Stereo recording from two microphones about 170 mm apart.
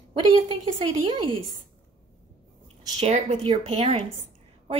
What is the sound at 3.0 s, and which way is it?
Speech, 40° right (ahead or behind).